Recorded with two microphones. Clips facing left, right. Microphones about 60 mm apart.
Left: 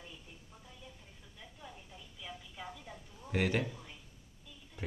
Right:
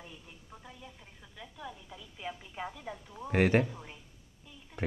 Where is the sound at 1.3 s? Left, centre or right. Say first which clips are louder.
Right 7 dB; right.